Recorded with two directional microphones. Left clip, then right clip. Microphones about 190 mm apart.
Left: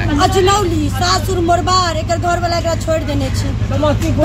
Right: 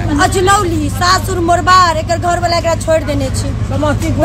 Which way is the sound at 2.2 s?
35° right (ahead or behind).